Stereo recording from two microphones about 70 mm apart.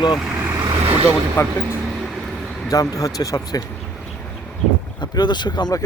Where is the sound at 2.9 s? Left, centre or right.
Left.